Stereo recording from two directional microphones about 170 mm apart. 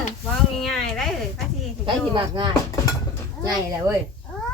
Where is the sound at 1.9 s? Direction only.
30° right (ahead or behind).